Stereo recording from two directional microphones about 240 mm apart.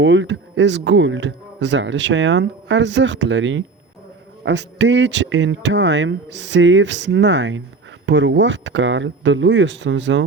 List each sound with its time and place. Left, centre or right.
0.0 s speech: right